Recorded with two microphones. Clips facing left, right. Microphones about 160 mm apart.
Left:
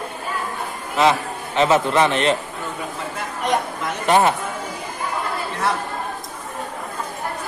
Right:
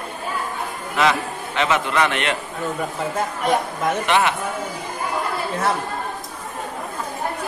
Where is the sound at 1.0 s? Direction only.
30° left (ahead or behind).